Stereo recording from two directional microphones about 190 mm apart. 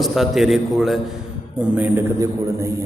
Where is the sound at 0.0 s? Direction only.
Centre (ahead or behind).